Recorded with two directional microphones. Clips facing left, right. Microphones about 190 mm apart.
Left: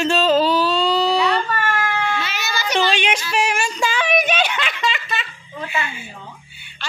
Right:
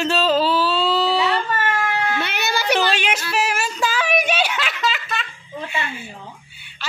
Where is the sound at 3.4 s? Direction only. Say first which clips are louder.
Left 1 dB; 5° right (ahead or behind).